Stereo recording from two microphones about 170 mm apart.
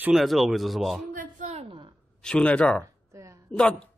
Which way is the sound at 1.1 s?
45° right (ahead or behind).